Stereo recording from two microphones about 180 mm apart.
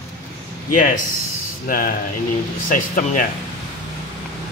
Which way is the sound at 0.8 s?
45° left (ahead or behind).